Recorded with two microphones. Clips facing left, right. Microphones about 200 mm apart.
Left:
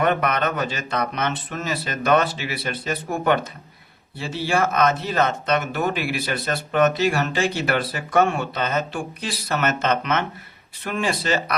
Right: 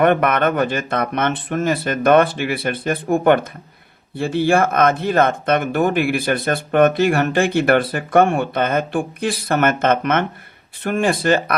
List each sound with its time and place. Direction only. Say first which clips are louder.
0.0 s speech: right 6 dB; 55° right (ahead or behind)